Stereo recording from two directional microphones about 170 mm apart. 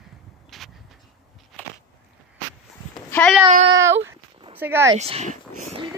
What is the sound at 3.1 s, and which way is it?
Child singing, 10° left (ahead or behind).